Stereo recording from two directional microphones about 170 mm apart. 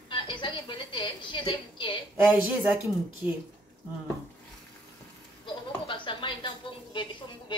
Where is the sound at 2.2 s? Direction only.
10° right (ahead or behind).